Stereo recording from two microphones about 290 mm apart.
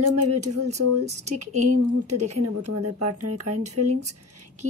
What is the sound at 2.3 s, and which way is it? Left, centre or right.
A woman's voice, right.